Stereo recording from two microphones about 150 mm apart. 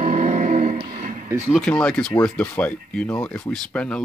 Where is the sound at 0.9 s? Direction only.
60° right (ahead or behind).